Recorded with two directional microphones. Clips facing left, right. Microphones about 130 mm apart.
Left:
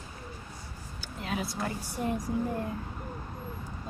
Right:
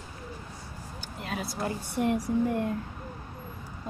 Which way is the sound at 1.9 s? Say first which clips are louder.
Right 7 dB; 70° right (ahead or behind).